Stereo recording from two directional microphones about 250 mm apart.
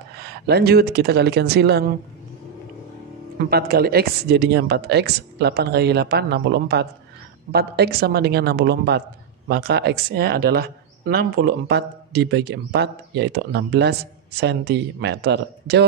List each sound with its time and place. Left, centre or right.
0.2 s speech: right
3.3 s speech: right